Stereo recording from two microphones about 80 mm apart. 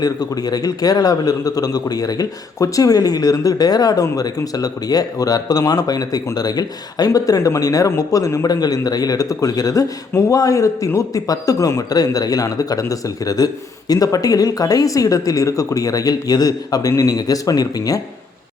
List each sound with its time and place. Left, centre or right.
0.0 s speech: left
8.4 s speech: left